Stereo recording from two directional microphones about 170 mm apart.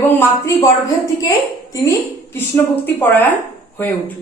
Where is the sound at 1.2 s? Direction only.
20° left (ahead or behind).